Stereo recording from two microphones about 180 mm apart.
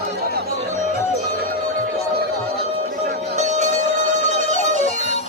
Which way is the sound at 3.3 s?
40° right (ahead or behind).